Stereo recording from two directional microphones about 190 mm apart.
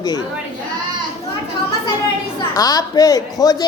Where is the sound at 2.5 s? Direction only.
20° left (ahead or behind).